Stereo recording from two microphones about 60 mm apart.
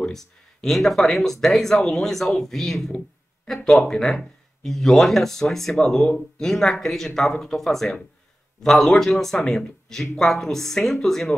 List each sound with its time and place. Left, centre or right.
0.0 s speech: centre
6.0 s speech: centre
6.4 s speech: centre